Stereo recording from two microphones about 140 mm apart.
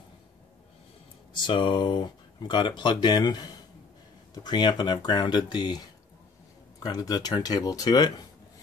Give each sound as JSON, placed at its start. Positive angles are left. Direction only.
{"t": 1.3, "sound": "speech", "side_deg": 35}